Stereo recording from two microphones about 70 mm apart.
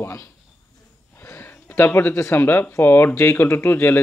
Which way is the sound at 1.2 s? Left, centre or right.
Left.